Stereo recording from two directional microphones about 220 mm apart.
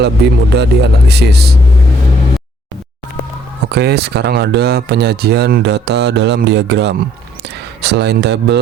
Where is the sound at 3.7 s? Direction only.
50° right (ahead or behind).